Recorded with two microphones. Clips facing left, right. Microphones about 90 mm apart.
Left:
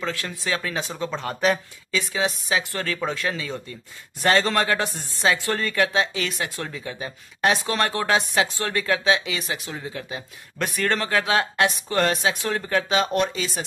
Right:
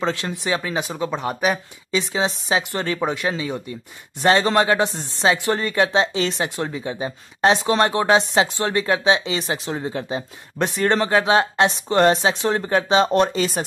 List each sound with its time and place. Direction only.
0.0 s speech: 25° right (ahead or behind); by 13.7 s 40° right (ahead or behind)